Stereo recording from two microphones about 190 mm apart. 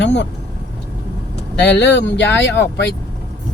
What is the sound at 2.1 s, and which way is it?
Speech, 70° left (ahead or behind).